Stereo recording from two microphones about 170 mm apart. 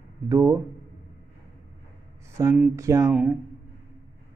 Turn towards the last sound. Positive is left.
turn(degrees=-5)  # may be behind; listen again after turning